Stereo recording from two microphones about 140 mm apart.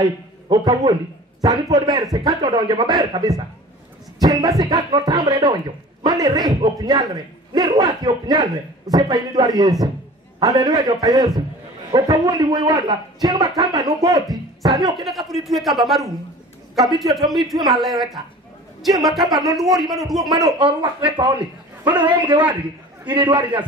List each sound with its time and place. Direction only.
0.0 s a man's voice: 30° right (ahead or behind)
15.0 s speech: centre (ahead or behind)
20.5 s speech: 40° right (ahead or behind)